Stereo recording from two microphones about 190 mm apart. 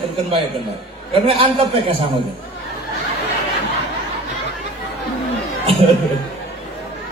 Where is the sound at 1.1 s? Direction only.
30° right (ahead or behind).